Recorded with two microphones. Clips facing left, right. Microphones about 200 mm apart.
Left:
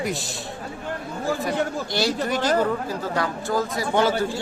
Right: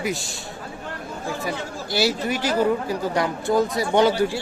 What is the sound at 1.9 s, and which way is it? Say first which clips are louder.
Speech: right 5 dB; 5° right (ahead or behind).